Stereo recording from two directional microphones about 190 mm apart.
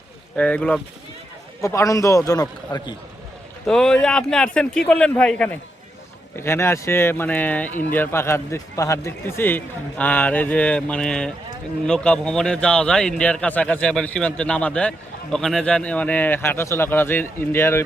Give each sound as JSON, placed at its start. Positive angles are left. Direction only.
{"t": 0.3, "sound": "a man's voice", "side_deg": 5}
{"t": 3.7, "sound": "a man's voice", "side_deg": 5}